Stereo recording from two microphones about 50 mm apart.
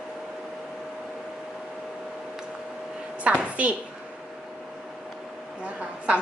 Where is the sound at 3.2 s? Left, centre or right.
Right.